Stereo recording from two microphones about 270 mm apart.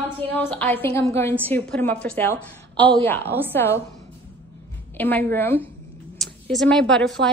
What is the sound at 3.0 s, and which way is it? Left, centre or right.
Speech, centre.